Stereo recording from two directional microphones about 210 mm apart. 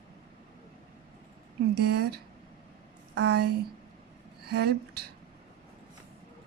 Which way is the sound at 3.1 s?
50° right (ahead or behind).